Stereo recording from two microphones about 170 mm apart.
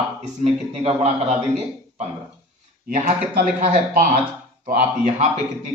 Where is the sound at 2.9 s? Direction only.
50° right (ahead or behind).